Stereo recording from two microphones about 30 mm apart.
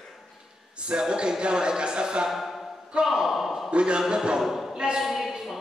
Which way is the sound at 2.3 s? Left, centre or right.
Centre.